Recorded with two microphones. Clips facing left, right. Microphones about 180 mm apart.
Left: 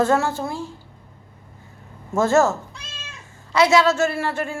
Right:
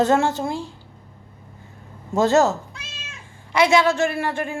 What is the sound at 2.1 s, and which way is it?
A woman's voice, 20° right (ahead or behind).